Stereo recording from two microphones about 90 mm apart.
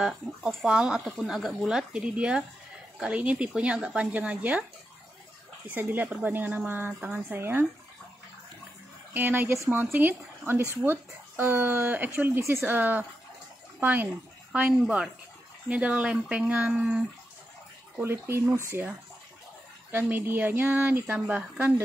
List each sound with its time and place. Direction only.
0.7 s speech: 10° right (ahead or behind)
5.7 s speech: 20° right (ahead or behind)
9.1 s speech: 20° right (ahead or behind)
14.7 s speech: 5° right (ahead or behind)
18.0 s speech: 25° right (ahead or behind)